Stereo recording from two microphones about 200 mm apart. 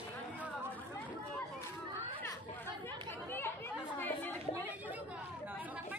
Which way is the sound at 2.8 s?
10° left (ahead or behind).